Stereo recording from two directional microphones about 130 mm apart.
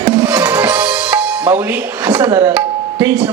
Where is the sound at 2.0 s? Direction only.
25° right (ahead or behind).